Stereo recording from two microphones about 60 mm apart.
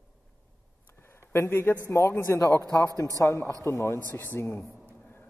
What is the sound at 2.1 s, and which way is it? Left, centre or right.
Speech, left.